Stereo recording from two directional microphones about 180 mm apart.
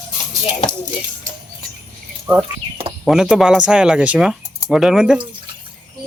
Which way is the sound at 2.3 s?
5° right (ahead or behind).